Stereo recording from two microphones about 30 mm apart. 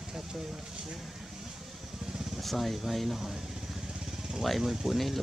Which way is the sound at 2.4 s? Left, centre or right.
Centre.